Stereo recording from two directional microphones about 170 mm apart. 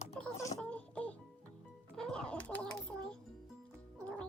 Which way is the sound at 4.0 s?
5° left (ahead or behind).